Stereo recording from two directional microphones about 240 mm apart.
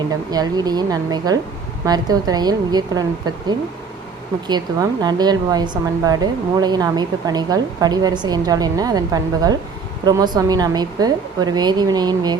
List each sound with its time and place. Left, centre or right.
0.3 s a woman's voice: centre
4.4 s a woman's voice: centre